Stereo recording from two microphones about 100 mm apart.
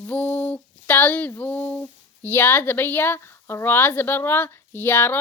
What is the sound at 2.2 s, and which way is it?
Speech, 20° left (ahead or behind).